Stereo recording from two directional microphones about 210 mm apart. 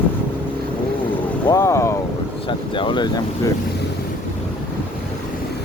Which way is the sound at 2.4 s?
25° left (ahead or behind).